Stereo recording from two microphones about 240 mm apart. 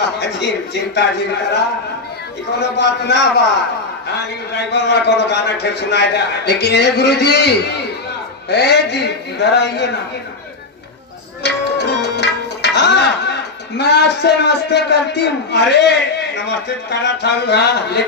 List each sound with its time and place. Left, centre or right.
0.2 s speech: left
2.8 s a man's voice: left
4.5 s a man's voice: left
11.4 s tabla: left
13.7 s a man's voice: left